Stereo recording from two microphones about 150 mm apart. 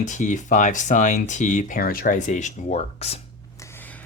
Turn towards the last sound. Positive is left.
turn(degrees=10)  # may be behind; listen again after turning